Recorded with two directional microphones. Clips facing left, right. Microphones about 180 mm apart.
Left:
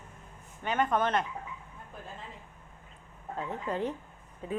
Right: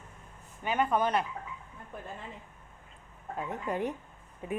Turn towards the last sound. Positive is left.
turn(degrees=-15)  # may be behind; listen again after turning